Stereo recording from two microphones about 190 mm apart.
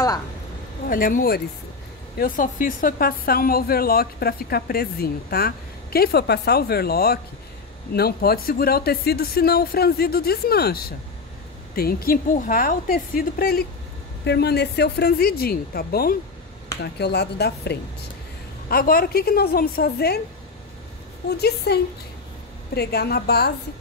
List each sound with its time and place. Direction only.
0.8 s speech: 50° left (ahead or behind)
14.2 s speech: 60° left (ahead or behind)
21.3 s speech: 60° left (ahead or behind)
22.8 s speech: 55° left (ahead or behind)